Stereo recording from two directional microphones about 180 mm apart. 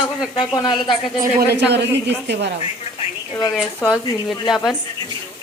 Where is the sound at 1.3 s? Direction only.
65° right (ahead or behind).